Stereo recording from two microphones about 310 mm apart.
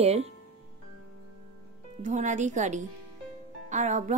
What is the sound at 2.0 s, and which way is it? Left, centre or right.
A woman's voice, right.